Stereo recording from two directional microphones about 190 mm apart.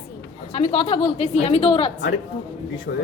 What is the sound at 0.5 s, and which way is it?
A woman's voice, 30° left (ahead or behind).